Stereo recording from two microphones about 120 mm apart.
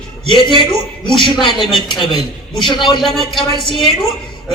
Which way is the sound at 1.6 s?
40° left (ahead or behind).